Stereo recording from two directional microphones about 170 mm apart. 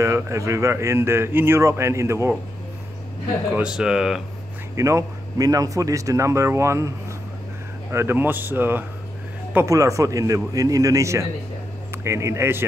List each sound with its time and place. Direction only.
0.0 s speech: 15° right (ahead or behind)
3.5 s speech: 5° right (ahead or behind)
4.7 s speech: 20° right (ahead or behind)
7.9 s speech: 15° right (ahead or behind)